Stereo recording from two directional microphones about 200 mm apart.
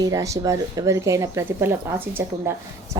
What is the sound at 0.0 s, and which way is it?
A woman's voice, 15° right (ahead or behind).